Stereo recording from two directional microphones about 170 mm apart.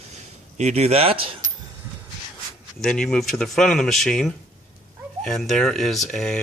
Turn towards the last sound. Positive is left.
turn(degrees=5)  # may be behind; listen again after turning